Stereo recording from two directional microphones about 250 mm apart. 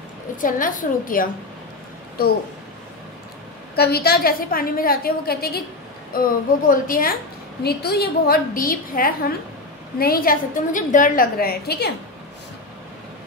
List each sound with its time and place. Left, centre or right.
0.4 s a woman's voice: left
3.7 s a woman's voice: left